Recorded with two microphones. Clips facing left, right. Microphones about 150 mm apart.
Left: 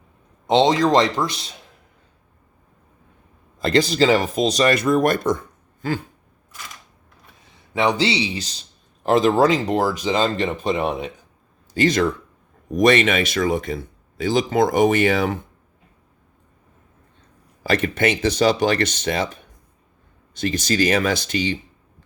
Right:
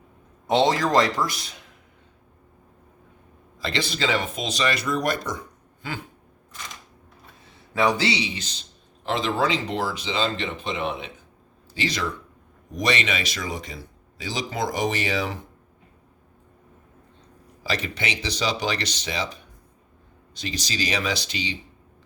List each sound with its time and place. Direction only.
0.4 s a man's voice: 20° left (ahead or behind)
3.6 s speech: 45° left (ahead or behind)
7.7 s a man's voice: 25° left (ahead or behind)
9.0 s speech: 45° left (ahead or behind)
17.6 s speech: 55° left (ahead or behind)